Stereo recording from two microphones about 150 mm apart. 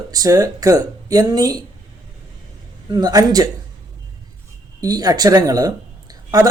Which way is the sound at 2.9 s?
25° right (ahead or behind).